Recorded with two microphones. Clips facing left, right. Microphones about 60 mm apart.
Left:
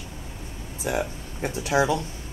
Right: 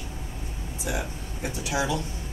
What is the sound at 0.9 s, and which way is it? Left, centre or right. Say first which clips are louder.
Speech: left 5 dB; left.